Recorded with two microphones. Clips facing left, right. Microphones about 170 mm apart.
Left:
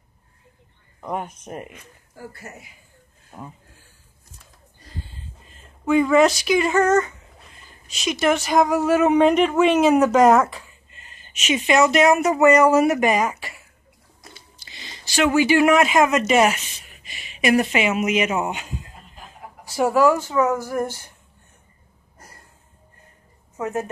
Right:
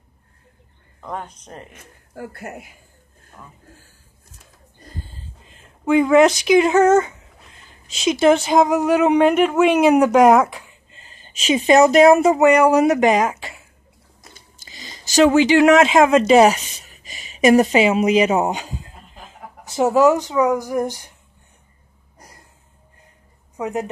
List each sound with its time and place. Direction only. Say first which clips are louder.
1.0 s speech: left 2 dB; 15° left (ahead or behind)
1.8 s speech: right 5 dB; 60° right (ahead or behind)
4.8 s a sound: right 1 dB; 45° right (ahead or behind)
5.9 s speech: right 3 dB; 10° right (ahead or behind)
8.0 s speech: right 6 dB; 25° right (ahead or behind); by 10.6 s 10° right (ahead or behind)
10.9 s speech: right 2 dB; 30° right (ahead or behind)
12.4 s speech: left 1 dB; 15° right (ahead or behind)
14.7 s a sound: right 2 dB; 40° right (ahead or behind)
15.3 s speech: right 1 dB; 20° right (ahead or behind); by 18.9 s 35° right (ahead or behind)
19.6 s speech: right 3 dB; 20° right (ahead or behind)
22.2 s a sound: right 1 dB; 15° right (ahead or behind)
23.5 s a woman's voice: right 2 dB; 15° right (ahead or behind)